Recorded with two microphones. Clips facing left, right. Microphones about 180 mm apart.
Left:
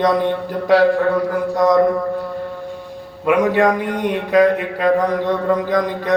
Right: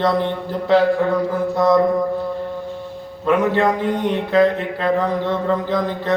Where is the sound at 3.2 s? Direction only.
15° left (ahead or behind).